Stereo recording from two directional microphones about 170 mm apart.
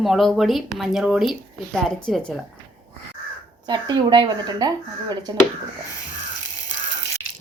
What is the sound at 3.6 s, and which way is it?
Speech, 25° right (ahead or behind).